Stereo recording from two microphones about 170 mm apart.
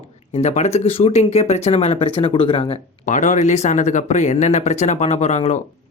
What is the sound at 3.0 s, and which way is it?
Speech, 45° left (ahead or behind).